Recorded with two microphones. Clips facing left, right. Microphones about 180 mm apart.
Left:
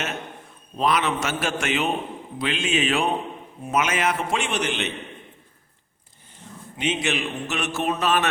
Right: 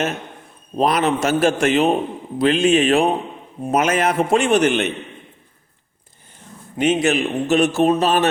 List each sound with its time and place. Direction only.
0.8 s a man's voice: 40° right (ahead or behind)
3.6 s a man's voice: 40° right (ahead or behind)
6.7 s speech: 40° right (ahead or behind)